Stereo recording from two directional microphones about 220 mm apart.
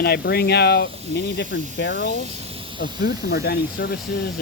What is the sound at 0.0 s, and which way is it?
Speech, 45° left (ahead or behind).